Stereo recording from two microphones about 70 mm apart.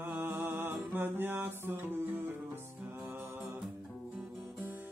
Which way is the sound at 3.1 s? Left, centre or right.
Right.